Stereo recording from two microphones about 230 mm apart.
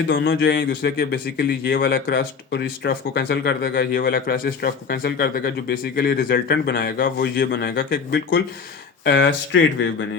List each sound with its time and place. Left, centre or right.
0.1 s a man's voice: left